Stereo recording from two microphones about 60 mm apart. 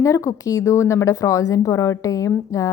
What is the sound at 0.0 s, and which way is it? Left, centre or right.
A woman's voice, left.